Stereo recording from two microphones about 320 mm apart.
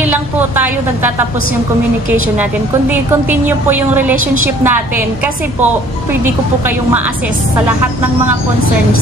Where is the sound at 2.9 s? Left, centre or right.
Centre.